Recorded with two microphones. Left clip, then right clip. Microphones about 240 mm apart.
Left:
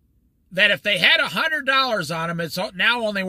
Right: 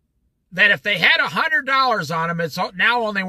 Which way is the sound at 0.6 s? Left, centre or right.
Centre.